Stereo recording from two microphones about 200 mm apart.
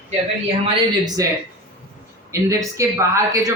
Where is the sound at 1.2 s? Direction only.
15° right (ahead or behind).